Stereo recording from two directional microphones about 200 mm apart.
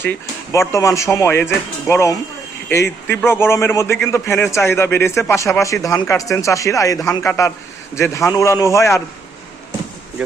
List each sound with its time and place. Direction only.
0.5 s speech: 15° left (ahead or behind)